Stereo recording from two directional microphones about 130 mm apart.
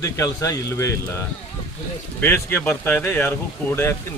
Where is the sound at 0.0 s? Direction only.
25° left (ahead or behind).